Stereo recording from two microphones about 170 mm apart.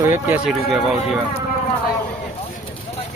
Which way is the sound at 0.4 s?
Centre (ahead or behind).